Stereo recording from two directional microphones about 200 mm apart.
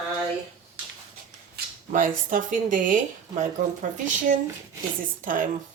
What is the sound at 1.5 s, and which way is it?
Speech, 45° right (ahead or behind).